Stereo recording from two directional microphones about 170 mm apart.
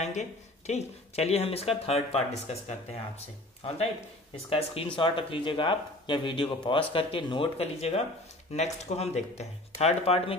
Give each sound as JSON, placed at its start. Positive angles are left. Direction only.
{"t": 0.0, "sound": "speech", "side_deg": 40}
{"t": 4.5, "sound": "speech", "side_deg": 35}